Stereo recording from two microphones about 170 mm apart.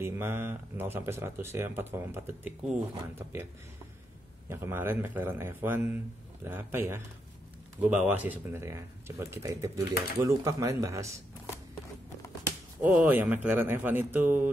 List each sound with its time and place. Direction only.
0.0 s speech: 15° right (ahead or behind)
4.5 s speech: 15° right (ahead or behind)
12.8 s speech: 10° right (ahead or behind)